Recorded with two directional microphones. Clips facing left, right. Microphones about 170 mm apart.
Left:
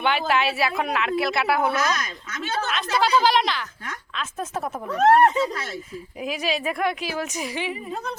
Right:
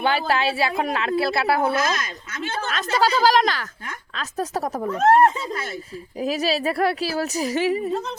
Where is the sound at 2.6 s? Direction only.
40° right (ahead or behind).